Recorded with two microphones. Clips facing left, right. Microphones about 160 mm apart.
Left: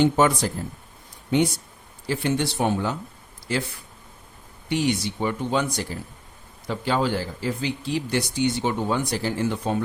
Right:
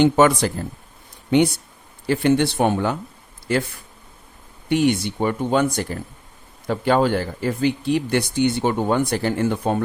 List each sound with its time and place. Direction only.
0.0 s speech: 75° right (ahead or behind); by 3.6 s 55° right (ahead or behind)
4.7 s speech: 55° right (ahead or behind)